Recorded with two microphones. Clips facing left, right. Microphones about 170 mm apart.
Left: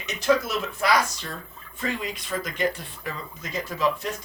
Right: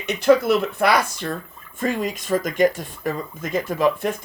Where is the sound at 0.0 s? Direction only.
60° right (ahead or behind).